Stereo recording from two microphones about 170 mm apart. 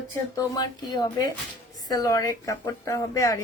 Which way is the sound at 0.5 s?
25° left (ahead or behind).